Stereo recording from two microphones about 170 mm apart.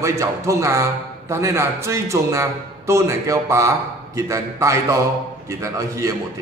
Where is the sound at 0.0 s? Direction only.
20° right (ahead or behind).